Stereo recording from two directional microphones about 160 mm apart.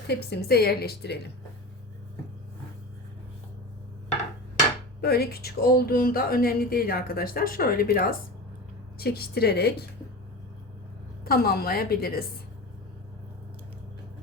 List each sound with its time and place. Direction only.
0.1 s a woman's voice: 90° left
4.9 s speech: 75° left (ahead or behind)
11.3 s speech: 70° left (ahead or behind)